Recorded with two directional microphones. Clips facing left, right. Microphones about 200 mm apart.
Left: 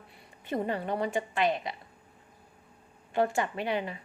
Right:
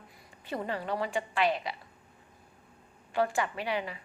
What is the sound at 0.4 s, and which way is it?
A woman's voice, 20° left (ahead or behind).